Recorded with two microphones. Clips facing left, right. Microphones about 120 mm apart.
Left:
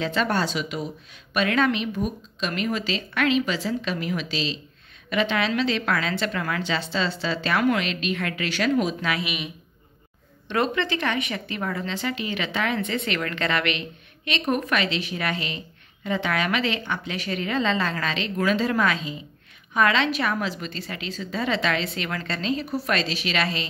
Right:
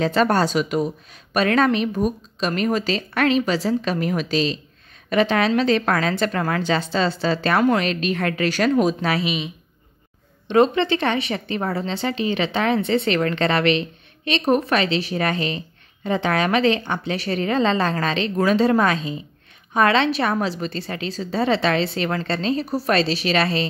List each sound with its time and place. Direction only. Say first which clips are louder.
0.0 s a woman's voice: right 6 dB; 40° right (ahead or behind)
10.5 s a woman's voice: right 7 dB; 25° right (ahead or behind)